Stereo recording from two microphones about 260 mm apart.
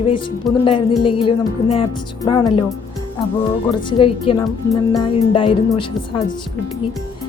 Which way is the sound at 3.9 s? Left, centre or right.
Left.